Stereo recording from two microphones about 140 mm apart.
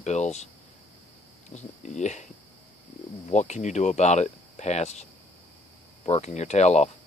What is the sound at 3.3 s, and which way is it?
Speech, 55° left (ahead or behind).